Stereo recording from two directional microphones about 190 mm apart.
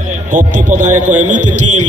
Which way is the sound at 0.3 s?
40° right (ahead or behind).